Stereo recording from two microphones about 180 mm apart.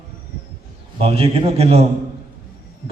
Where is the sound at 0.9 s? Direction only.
30° right (ahead or behind).